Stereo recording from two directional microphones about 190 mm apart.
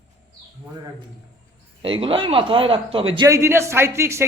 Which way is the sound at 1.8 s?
30° right (ahead or behind).